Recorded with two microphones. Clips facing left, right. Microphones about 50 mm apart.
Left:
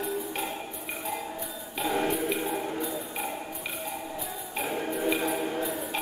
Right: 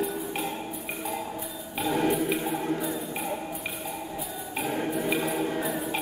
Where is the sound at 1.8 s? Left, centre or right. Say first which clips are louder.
Right 2 dB; centre.